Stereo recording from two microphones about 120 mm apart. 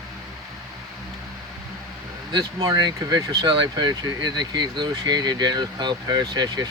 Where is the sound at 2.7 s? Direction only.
30° right (ahead or behind).